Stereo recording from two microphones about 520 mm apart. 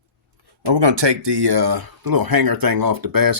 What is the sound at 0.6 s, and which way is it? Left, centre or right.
Speech, right.